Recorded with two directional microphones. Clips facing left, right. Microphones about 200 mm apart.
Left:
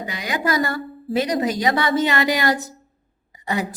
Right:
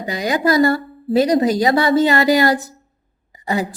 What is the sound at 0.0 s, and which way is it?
A woman's voice, 40° right (ahead or behind).